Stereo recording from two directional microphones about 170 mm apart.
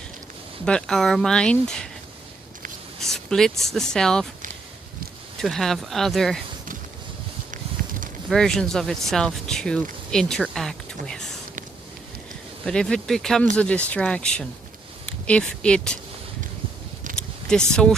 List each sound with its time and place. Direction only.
0.6 s speech: 5° left (ahead or behind)
3.0 s speech: centre (ahead or behind)
5.4 s speech: centre (ahead or behind)
7.5 s a sound: 50° right (ahead or behind)
8.3 s speech: 5° left (ahead or behind)
12.6 s speech: 5° left (ahead or behind)
17.5 s speech: 5° left (ahead or behind)